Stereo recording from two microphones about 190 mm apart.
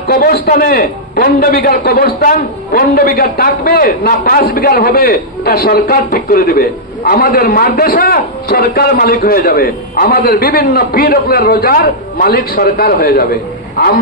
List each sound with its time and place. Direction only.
0.1 s a man's voice: 50° left (ahead or behind)